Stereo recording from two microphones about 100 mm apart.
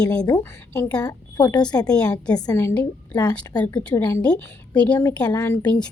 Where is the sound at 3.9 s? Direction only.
25° left (ahead or behind).